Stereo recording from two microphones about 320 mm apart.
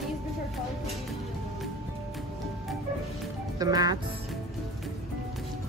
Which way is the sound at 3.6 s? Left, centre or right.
Centre.